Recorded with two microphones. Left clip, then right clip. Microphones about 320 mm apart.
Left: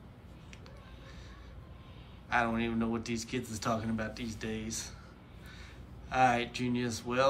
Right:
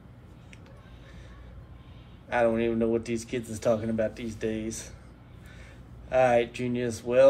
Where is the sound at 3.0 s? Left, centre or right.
Left.